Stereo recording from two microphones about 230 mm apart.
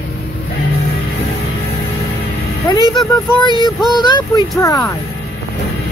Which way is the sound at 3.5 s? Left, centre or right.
Centre.